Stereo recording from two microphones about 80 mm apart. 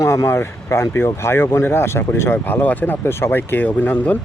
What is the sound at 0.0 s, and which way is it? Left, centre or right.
Speech, left.